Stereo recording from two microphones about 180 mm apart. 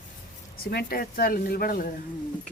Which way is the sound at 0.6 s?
60° left (ahead or behind).